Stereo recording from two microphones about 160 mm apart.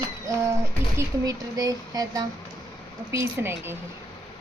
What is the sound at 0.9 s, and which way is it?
Speech, 20° right (ahead or behind).